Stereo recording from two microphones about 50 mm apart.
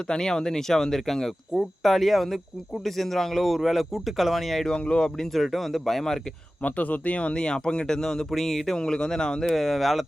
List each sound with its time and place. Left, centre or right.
0.1 s a man's voice: centre
4.6 s speech: centre
5.2 s a man's voice: centre
6.6 s speech: left; by 8.8 s centre
8.8 s speech: centre